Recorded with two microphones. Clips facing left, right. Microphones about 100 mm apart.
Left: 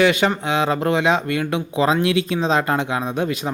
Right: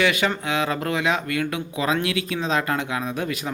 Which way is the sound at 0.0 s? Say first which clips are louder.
Left 5 dB; 25° left (ahead or behind).